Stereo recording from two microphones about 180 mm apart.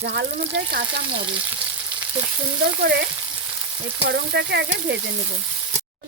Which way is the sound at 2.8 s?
65° right (ahead or behind).